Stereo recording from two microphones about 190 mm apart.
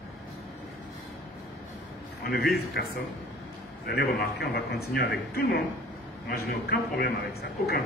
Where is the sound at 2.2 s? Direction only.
55° left (ahead or behind).